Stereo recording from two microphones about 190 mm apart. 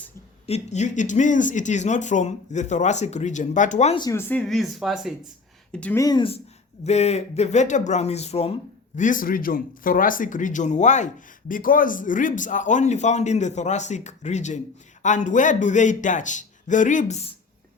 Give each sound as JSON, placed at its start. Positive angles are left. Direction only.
{"t": 0.4, "sound": "speech", "side_deg": 35}
{"t": 3.9, "sound": "speech", "side_deg": 20}
{"t": 6.0, "sound": "speech", "side_deg": 20}
{"t": 9.0, "sound": "speech", "side_deg": 45}